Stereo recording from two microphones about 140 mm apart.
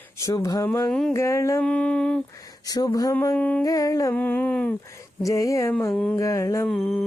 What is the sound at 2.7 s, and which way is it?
Speech, 25° left (ahead or behind).